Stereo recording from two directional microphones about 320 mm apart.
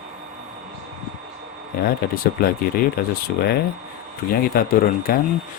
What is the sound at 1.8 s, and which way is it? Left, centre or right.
Speech, left.